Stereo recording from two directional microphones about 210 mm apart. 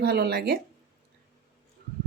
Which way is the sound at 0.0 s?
50° right (ahead or behind).